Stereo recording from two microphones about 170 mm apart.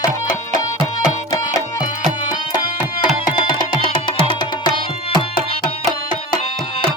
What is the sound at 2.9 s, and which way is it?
Music, 30° left (ahead or behind).